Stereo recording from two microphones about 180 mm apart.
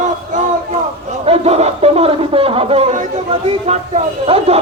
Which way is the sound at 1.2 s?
35° right (ahead or behind).